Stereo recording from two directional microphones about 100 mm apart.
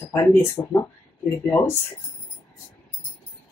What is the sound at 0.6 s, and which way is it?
Speech, 50° left (ahead or behind).